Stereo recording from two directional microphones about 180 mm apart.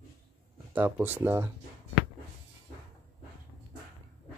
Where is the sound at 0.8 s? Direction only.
10° right (ahead or behind).